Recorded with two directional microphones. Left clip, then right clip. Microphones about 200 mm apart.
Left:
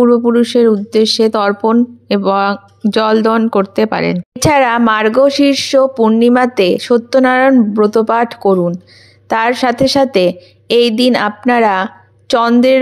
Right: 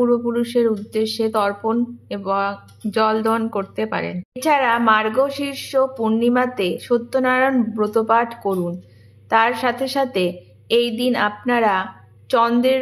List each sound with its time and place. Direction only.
0.0 s speech: 40° left (ahead or behind)